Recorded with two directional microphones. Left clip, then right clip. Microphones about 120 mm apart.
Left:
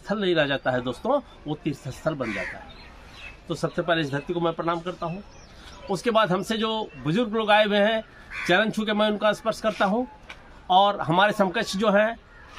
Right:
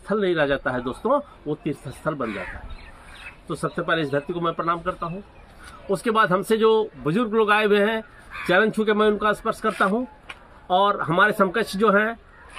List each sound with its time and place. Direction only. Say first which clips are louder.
0.0 s speech: right 2 dB; 30° left (ahead or behind)
3.4 s speech: even; 25° left (ahead or behind)